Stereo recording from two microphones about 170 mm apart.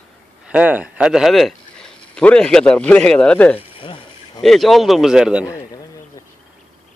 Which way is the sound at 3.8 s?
30° left (ahead or behind).